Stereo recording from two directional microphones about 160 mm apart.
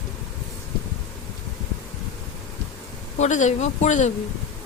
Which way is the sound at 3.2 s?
50° left (ahead or behind).